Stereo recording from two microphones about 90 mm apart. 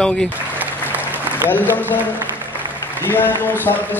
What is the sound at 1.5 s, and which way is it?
Speech, 20° left (ahead or behind).